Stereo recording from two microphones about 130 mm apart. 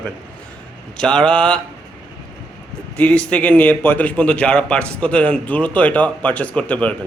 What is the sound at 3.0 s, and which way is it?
A man's voice, 10° left (ahead or behind).